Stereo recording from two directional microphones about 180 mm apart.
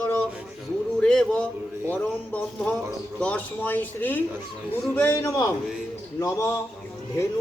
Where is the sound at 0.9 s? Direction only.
5° left (ahead or behind).